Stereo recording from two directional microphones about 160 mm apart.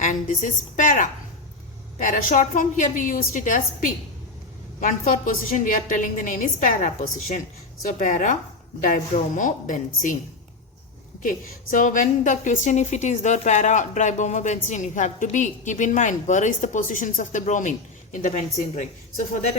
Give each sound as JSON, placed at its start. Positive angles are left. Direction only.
{"t": 0.0, "sound": "a woman's voice", "side_deg": 55}
{"t": 11.2, "sound": "a woman's voice", "side_deg": 55}